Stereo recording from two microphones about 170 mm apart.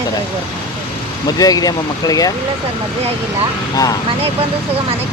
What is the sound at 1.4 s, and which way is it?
Speech, 20° left (ahead or behind).